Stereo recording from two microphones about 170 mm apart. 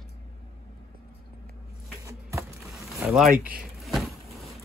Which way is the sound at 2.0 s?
20° right (ahead or behind).